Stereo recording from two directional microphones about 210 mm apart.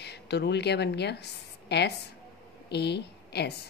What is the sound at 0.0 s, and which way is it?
A woman's voice, 50° left (ahead or behind).